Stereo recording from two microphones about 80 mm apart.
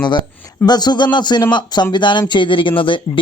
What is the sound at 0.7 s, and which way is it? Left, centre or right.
Speech, left.